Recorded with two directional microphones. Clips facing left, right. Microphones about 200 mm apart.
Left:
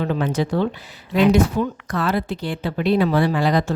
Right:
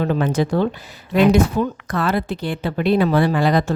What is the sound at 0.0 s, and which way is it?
A woman's voice, 50° right (ahead or behind).